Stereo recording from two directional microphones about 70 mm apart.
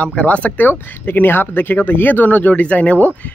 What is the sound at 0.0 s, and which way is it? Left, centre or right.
Speech, centre.